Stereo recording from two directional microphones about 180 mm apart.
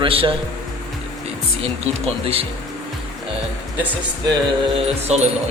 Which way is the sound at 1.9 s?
35° right (ahead or behind).